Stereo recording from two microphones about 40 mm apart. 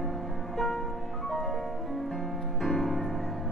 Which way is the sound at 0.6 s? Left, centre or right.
Centre.